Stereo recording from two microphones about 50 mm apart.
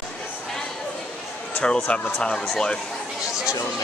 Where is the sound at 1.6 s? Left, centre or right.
Centre.